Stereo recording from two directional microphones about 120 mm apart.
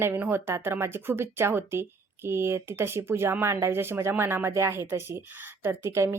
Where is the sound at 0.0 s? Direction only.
20° right (ahead or behind).